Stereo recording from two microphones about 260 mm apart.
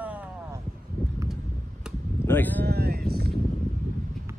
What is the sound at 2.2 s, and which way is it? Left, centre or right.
Speech, centre.